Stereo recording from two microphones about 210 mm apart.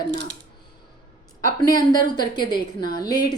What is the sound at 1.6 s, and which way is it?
A woman's voice, 20° left (ahead or behind).